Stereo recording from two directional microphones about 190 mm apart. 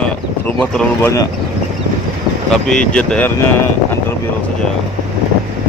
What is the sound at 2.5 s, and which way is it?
Speech, 5° left (ahead or behind).